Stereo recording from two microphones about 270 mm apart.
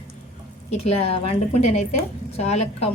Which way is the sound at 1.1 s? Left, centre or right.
Left.